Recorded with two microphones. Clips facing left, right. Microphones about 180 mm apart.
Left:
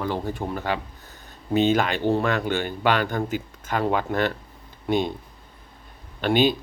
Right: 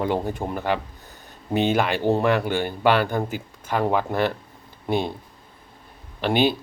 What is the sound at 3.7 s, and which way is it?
Speech, 5° right (ahead or behind).